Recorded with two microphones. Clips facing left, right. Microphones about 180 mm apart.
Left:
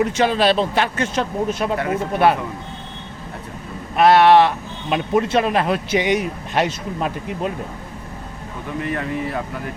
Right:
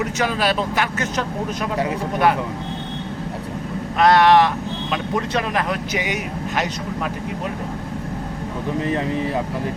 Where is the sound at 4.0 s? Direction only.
25° left (ahead or behind).